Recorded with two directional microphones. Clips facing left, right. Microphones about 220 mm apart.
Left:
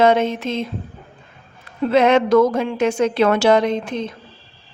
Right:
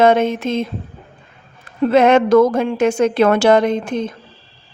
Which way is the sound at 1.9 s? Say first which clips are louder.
Right 2 dB; 50° right (ahead or behind).